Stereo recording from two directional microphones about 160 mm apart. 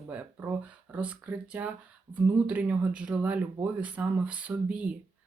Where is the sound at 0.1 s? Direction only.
10° right (ahead or behind).